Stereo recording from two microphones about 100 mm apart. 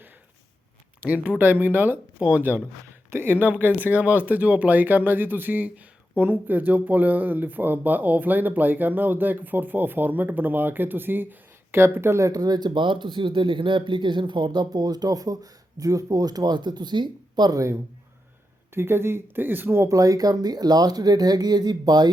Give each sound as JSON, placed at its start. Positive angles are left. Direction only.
{"t": 1.0, "sound": "speech", "side_deg": -15}